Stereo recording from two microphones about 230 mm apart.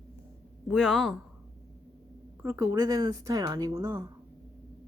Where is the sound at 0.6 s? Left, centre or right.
Centre.